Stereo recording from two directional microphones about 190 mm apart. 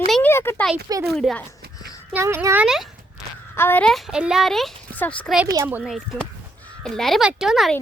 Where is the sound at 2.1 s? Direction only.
15° right (ahead or behind).